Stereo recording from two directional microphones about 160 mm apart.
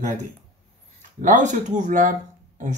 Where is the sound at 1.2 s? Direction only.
50° right (ahead or behind).